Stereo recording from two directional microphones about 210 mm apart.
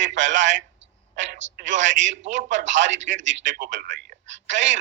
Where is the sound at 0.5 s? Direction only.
60° right (ahead or behind).